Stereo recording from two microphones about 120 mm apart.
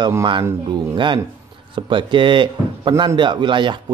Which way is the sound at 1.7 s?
45° right (ahead or behind).